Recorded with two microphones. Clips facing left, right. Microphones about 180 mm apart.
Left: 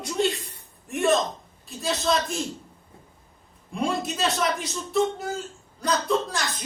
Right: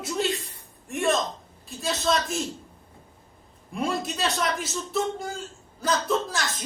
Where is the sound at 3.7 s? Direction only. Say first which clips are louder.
Left 1 dB; centre (ahead or behind).